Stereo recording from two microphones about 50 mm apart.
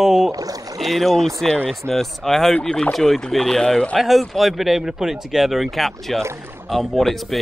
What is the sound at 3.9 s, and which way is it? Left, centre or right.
Speech, centre.